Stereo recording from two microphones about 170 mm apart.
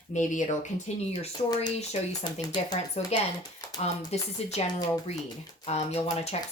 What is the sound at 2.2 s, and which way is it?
Speech, 25° left (ahead or behind).